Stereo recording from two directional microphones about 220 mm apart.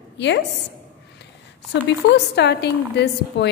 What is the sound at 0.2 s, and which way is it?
Speech, 55° left (ahead or behind).